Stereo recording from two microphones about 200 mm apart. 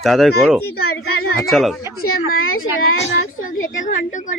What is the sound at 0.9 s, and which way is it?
Speech, 55° left (ahead or behind).